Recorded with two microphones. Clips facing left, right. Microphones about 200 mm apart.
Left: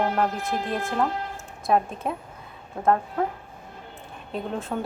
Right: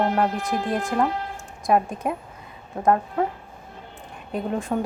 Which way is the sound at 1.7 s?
5° right (ahead or behind).